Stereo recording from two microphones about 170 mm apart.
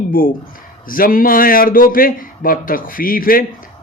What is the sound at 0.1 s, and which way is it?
Speech, 55° left (ahead or behind).